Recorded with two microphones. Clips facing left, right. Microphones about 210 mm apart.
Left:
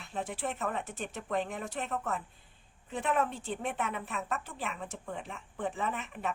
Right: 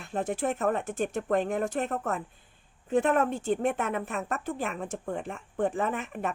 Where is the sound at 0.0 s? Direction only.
45° right (ahead or behind).